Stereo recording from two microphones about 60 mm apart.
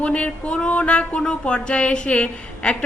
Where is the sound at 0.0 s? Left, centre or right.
Left.